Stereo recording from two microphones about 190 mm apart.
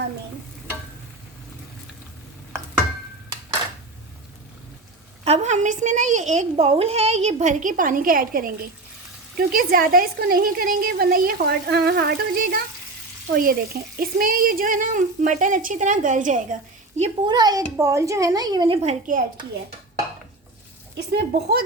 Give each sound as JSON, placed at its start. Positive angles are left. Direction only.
{"t": 5.2, "sound": "a woman's voice", "side_deg": -35}
{"t": 17.2, "sound": "speech", "side_deg": -20}
{"t": 18.8, "sound": "a woman's voice", "side_deg": -40}
{"t": 21.1, "sound": "speech", "side_deg": -60}